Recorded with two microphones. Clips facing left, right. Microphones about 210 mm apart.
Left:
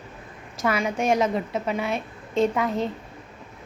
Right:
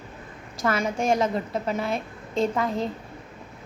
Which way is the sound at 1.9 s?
30° right (ahead or behind).